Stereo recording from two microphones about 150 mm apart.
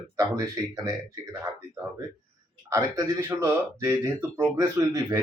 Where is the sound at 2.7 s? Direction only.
25° right (ahead or behind).